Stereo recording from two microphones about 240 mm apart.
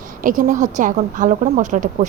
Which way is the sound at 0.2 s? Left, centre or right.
Right.